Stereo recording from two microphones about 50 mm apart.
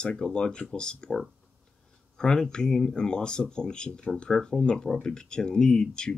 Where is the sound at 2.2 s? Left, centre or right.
Centre.